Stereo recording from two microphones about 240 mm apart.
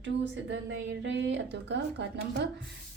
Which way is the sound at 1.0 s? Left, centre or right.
Right.